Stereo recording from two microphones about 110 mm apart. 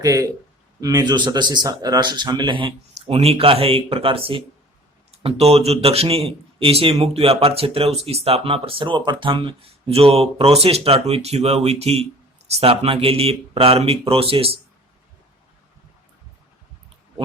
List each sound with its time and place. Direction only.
0.0 s a man's voice: 30° right (ahead or behind); by 3.2 s 50° right (ahead or behind)
3.2 s speech: 60° right (ahead or behind)
5.1 s speech: 70° right (ahead or behind)